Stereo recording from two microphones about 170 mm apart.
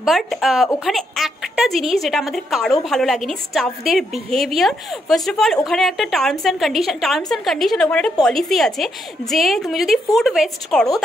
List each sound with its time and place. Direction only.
0.0 s a woman's voice: centre (ahead or behind)